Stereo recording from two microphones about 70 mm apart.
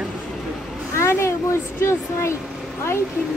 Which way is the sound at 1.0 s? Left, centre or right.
Left.